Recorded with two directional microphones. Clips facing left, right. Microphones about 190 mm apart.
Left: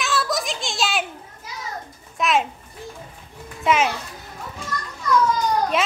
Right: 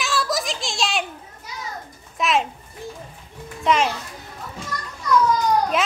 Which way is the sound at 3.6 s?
5° left (ahead or behind).